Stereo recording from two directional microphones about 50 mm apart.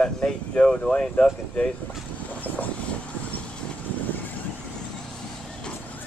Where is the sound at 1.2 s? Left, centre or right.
Left.